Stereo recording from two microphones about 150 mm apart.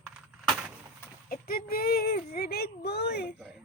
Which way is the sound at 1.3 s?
80° left.